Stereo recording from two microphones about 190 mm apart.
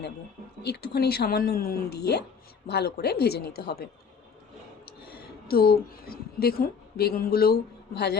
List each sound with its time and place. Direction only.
0.6 s speech: 55° left (ahead or behind)
4.9 s a woman's voice: 55° left (ahead or behind)